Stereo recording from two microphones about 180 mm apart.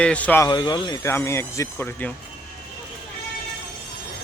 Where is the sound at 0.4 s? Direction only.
20° left (ahead or behind).